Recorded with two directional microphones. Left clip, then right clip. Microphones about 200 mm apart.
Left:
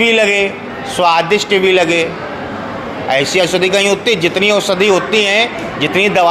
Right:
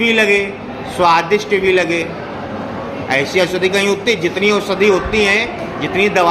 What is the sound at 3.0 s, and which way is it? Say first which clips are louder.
Speech: left 2 dB; 25° left (ahead or behind).